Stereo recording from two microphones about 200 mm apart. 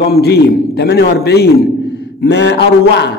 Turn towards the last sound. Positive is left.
turn(degrees=60)  # may be behind; listen again after turning